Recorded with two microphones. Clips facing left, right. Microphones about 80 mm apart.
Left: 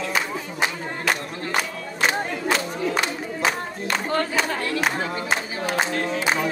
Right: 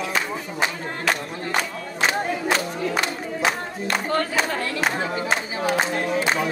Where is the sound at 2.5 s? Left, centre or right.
Centre.